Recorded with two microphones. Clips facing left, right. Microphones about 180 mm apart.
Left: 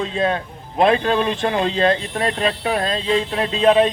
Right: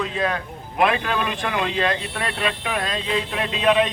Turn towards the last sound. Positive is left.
turn(degrees=30)  # may be behind; listen again after turning